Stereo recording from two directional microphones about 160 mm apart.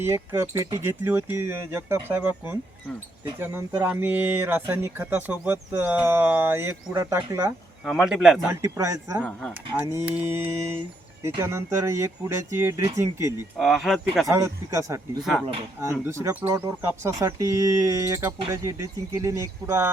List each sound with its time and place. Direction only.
0.0 s speech: 15° right (ahead or behind)
3.4 s speech: 15° right (ahead or behind)
7.9 s speech: 5° right (ahead or behind)
8.4 s speech: 15° right (ahead or behind)
13.6 s speech: centre (ahead or behind)
14.3 s speech: 20° right (ahead or behind)